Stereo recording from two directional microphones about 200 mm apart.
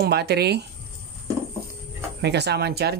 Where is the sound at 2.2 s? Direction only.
55° right (ahead or behind).